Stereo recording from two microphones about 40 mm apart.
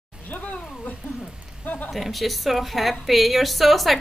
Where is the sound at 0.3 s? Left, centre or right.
Left.